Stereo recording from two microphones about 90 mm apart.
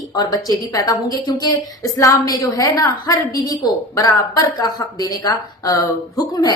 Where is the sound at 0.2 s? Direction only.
45° left (ahead or behind).